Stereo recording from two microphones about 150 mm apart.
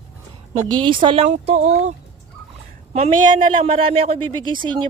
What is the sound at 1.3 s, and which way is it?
Speech, 50° right (ahead or behind).